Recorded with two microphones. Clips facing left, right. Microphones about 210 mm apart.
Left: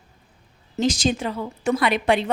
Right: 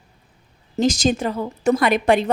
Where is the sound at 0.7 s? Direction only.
40° right (ahead or behind).